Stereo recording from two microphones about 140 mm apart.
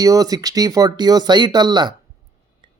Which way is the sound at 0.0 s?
25° right (ahead or behind).